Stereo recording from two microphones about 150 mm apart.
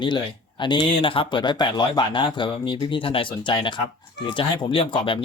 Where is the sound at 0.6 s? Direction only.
35° left (ahead or behind).